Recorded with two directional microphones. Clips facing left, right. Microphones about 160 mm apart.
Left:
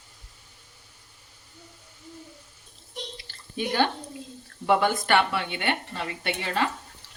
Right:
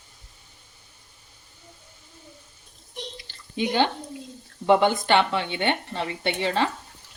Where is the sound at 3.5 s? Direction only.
20° right (ahead or behind).